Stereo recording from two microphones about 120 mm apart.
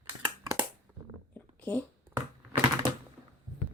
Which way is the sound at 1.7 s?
15° left (ahead or behind).